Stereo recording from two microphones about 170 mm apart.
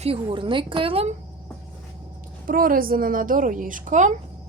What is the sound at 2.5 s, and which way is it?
A woman's voice, 55° right (ahead or behind).